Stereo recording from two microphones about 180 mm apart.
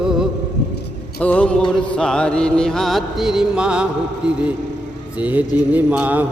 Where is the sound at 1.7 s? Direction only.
5° left (ahead or behind).